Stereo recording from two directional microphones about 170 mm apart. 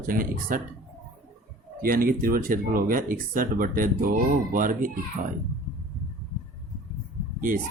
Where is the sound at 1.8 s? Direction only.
55° right (ahead or behind).